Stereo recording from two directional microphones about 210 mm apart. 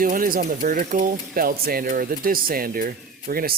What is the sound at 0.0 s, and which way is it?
Speech, 40° right (ahead or behind).